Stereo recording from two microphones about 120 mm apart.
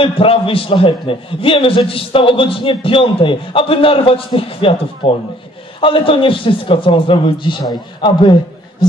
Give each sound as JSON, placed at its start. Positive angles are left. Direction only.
{"t": 0.0, "sound": "a man's voice", "side_deg": 50}